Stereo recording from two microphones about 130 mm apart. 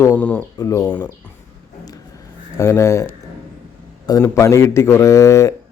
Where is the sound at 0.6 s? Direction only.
25° left (ahead or behind).